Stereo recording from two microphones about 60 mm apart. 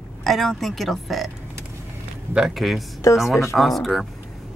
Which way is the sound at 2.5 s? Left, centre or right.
Centre.